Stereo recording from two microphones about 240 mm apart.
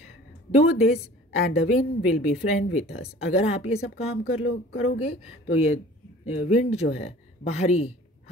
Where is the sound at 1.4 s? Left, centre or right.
Left.